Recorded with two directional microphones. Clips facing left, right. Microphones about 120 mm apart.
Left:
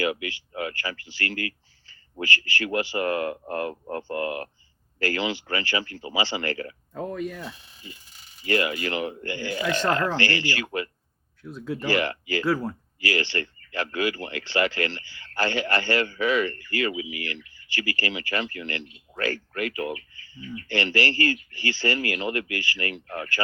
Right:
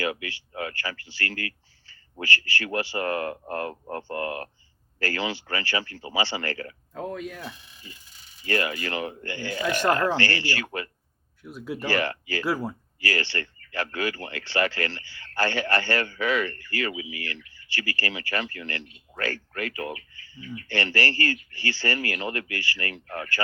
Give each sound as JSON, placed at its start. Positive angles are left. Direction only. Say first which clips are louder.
{"t": 0.0, "sound": "speech", "louder": "left 3 dB", "side_deg": 20}
{"t": 4.9, "sound": "speech", "louder": "left 2 dB", "side_deg": 15}
{"t": 6.9, "sound": "speech", "louder": "left 2 dB", "side_deg": 0}
{"t": 8.4, "sound": "speech", "louder": "left 2 dB", "side_deg": 20}
{"t": 9.6, "sound": "speech", "louder": "right 2 dB", "side_deg": -15}
{"t": 10.2, "sound": "speech", "louder": "left 1 dB", "side_deg": 15}
{"t": 11.4, "sound": "speech", "louder": "left 1 dB", "side_deg": -10}
{"t": 11.9, "sound": "speech", "louder": "left 2 dB", "side_deg": 15}
{"t": 12.5, "sound": "speech", "louder": "left 2 dB", "side_deg": -10}
{"t": 13.0, "sound": "speech", "louder": "left 2 dB", "side_deg": 20}